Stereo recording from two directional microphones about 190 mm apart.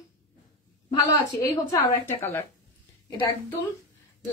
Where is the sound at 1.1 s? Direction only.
20° left (ahead or behind).